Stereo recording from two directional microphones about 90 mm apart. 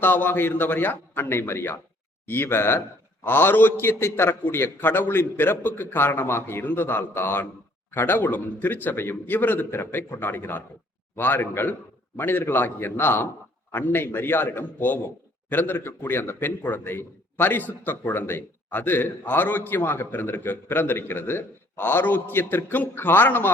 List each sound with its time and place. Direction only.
0.0 s a man's voice: 20° left (ahead or behind)